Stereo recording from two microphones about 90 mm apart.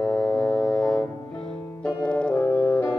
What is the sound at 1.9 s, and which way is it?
Music, 10° left (ahead or behind).